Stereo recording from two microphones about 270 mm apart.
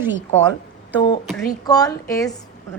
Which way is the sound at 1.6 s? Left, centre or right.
Centre.